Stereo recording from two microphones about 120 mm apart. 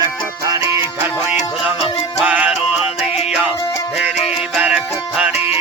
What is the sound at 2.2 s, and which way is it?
Music, 10° right (ahead or behind).